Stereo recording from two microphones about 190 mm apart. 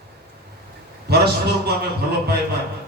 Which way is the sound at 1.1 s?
60° right (ahead or behind).